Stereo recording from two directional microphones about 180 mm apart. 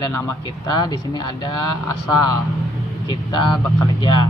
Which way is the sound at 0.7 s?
20° left (ahead or behind).